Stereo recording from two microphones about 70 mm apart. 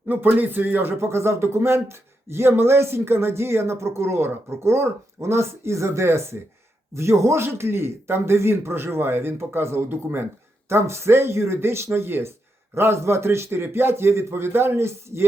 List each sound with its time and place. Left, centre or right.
0.1 s speech: right